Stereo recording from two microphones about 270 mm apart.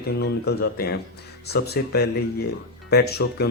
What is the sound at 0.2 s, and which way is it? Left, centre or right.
Speech, left.